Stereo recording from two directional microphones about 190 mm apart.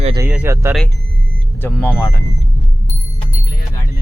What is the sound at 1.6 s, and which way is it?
Speech, 10° left (ahead or behind).